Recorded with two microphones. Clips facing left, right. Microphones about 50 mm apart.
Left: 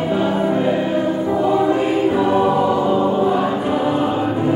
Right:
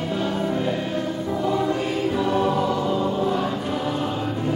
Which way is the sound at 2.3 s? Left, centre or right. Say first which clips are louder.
Left 6 dB; centre.